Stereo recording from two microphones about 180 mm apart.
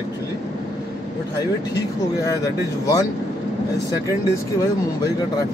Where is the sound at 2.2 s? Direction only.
20° left (ahead or behind).